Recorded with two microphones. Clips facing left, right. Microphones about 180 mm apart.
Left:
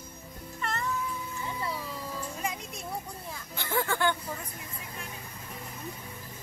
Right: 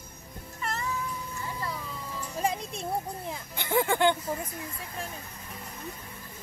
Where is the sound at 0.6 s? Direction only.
Centre (ahead or behind).